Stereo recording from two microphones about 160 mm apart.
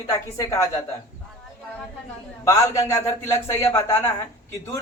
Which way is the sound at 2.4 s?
20° left (ahead or behind).